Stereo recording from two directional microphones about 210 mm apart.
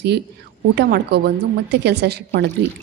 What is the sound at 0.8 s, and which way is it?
Speech, 50° right (ahead or behind).